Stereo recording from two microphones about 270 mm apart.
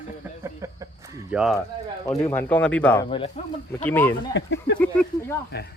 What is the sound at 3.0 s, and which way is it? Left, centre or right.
Speech, left.